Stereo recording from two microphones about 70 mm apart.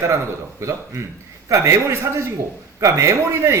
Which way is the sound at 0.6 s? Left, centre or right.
Right.